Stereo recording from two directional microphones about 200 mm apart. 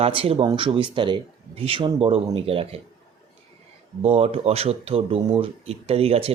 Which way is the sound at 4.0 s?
30° right (ahead or behind).